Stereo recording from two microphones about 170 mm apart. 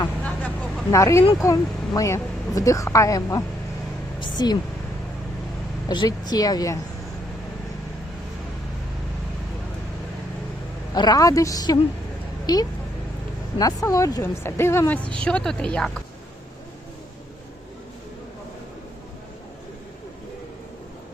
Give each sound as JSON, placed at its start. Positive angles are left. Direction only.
{"t": 0.2, "sound": "vehicle", "side_deg": 10}
{"t": 0.9, "sound": "a woman's voice", "side_deg": 20}
{"t": 4.2, "sound": "a sound", "side_deg": 25}
{"t": 5.9, "sound": "speech", "side_deg": 25}
{"t": 10.9, "sound": "a woman's voice", "side_deg": 25}